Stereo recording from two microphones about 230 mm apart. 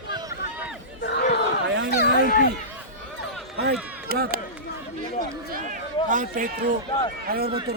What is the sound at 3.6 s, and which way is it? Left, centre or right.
Speech, right.